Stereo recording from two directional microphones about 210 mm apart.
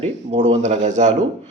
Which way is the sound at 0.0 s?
30° right (ahead or behind).